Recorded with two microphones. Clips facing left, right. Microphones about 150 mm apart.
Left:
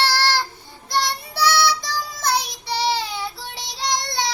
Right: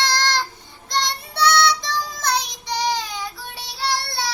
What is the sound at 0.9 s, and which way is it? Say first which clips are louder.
Child singing: left 1 dB; 5° left (ahead or behind).